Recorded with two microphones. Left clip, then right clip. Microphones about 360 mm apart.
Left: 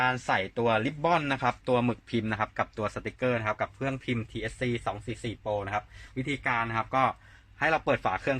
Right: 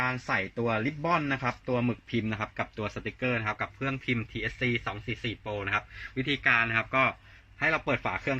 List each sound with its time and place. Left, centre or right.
0.0 s speech: left
7.6 s a man's voice: left